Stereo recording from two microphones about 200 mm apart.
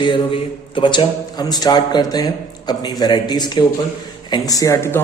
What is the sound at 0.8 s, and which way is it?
Speech, 25° left (ahead or behind).